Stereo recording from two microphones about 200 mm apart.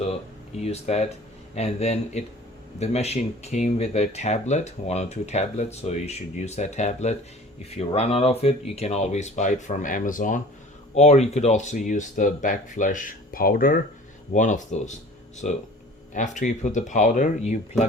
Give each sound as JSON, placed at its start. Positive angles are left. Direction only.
{"t": 0.6, "sound": "speech", "side_deg": 30}